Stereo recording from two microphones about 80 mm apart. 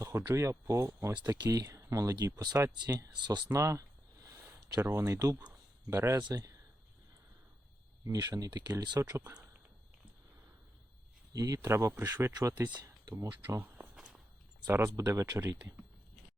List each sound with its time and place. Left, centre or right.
0.0 s speech: right
3.5 s a sound: right
4.8 s speech: right
5.0 s speech: right
8.0 s speech: right
9.0 s speech: right
11.3 s speech: right
11.6 s speech: right
12.3 s speech: right
13.6 s walk: right
13.9 s walk: centre
14.7 s speech: right